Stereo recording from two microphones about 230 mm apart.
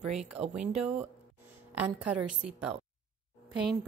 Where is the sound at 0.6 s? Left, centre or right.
Centre.